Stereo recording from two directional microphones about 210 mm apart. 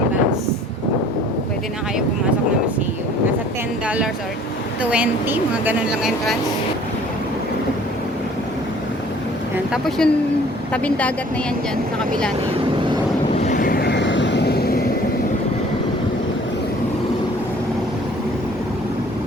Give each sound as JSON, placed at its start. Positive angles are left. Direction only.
{"t": 3.8, "sound": "a woman's voice", "side_deg": -5}
{"t": 9.7, "sound": "a woman's voice", "side_deg": 0}
{"t": 13.3, "sound": "vehicle", "side_deg": 35}